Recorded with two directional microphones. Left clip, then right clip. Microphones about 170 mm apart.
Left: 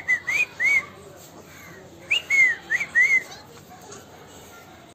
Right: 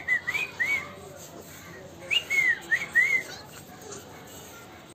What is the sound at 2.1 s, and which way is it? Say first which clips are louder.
Bird: left 5 dB; 25° left (ahead or behind).